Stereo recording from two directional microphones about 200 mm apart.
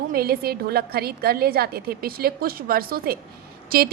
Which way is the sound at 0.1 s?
50° right (ahead or behind).